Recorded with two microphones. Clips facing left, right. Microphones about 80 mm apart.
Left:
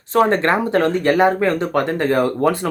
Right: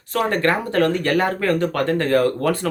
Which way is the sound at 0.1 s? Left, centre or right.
Left.